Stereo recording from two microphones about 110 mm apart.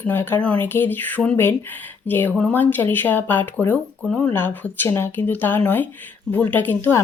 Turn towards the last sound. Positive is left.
turn(degrees=20)  # may be behind; listen again after turning